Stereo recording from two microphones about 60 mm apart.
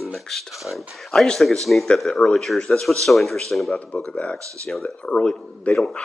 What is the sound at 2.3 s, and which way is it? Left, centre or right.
Speech, centre.